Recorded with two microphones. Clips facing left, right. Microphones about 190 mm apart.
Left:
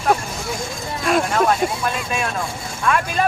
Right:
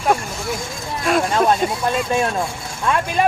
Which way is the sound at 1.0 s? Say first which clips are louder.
Right 1 dB; centre (ahead or behind).